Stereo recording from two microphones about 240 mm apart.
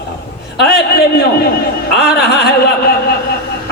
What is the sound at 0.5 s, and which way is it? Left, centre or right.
A man's voice, left.